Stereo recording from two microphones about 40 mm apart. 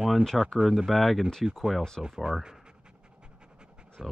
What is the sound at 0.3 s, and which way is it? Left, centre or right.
Speech, centre.